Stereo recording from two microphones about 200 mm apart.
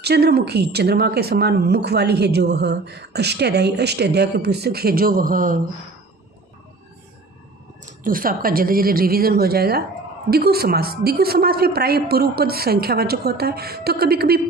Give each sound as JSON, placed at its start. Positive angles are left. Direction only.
{"t": 0.0, "sound": "speech", "side_deg": -55}
{"t": 7.9, "sound": "speech", "side_deg": -45}